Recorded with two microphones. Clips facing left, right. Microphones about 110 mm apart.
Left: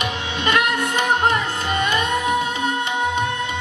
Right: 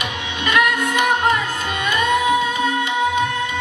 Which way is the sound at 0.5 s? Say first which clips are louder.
Right 2 dB; 30° left (ahead or behind).